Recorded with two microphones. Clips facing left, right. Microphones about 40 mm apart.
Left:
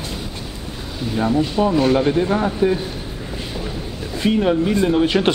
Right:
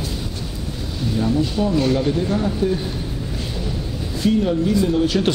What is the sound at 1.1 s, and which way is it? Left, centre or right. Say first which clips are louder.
A man's voice: left 2 dB; left.